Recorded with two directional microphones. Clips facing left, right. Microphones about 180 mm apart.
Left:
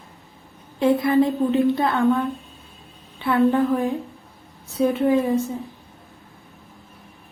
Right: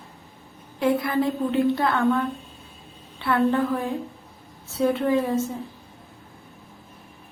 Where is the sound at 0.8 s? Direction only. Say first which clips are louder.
Left 5 dB; 25° left (ahead or behind).